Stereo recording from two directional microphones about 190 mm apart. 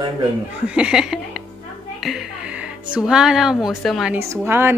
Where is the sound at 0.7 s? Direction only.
5° right (ahead or behind).